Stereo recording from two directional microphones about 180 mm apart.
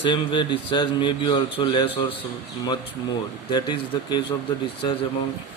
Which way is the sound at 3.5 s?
25° left (ahead or behind).